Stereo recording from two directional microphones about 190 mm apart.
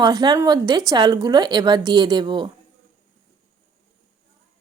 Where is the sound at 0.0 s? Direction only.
20° right (ahead or behind).